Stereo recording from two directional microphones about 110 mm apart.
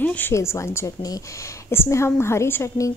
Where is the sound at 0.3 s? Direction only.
25° left (ahead or behind).